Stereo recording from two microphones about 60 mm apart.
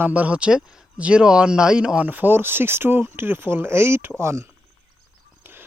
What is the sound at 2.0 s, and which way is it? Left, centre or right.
Speech, right.